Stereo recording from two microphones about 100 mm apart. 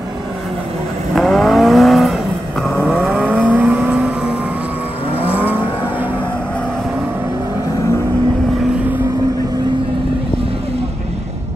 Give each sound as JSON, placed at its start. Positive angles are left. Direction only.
{"t": 1.1, "sound": "vehicle", "side_deg": 5}